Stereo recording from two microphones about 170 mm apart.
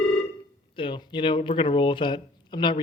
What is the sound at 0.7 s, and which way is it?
Speech, 30° left (ahead or behind).